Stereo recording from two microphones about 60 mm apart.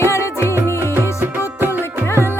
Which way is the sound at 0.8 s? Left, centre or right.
Right.